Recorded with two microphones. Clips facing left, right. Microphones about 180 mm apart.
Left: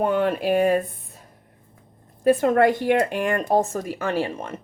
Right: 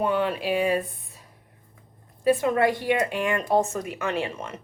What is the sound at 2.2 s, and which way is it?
A woman's voice, 50° left (ahead or behind).